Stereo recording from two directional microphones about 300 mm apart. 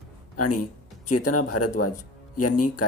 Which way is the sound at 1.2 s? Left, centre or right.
Left.